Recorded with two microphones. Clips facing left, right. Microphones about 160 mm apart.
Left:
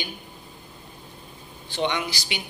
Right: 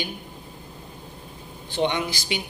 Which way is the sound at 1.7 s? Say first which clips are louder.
Right 2 dB; 50° right (ahead or behind).